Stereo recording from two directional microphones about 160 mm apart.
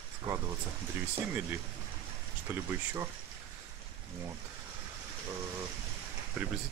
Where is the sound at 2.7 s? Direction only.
15° right (ahead or behind).